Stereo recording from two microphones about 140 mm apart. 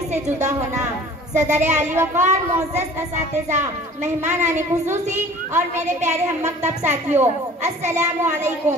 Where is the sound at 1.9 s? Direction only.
15° right (ahead or behind).